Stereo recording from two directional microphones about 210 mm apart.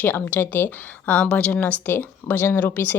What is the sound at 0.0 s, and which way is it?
A woman's voice, 10° left (ahead or behind).